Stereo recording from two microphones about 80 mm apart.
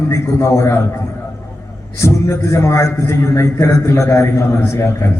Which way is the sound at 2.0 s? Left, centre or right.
Left.